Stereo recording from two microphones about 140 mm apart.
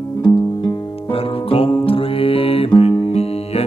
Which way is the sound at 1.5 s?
40° left (ahead or behind).